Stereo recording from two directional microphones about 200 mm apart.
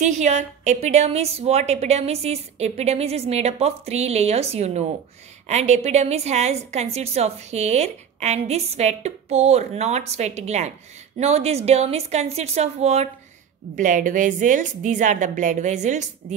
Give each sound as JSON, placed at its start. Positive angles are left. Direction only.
{"t": 0.0, "sound": "a woman's voice", "side_deg": -35}